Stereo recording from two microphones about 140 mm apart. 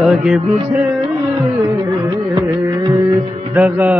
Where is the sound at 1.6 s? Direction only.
20° right (ahead or behind).